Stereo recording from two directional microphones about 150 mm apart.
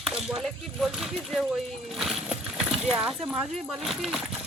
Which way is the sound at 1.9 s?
Centre (ahead or behind).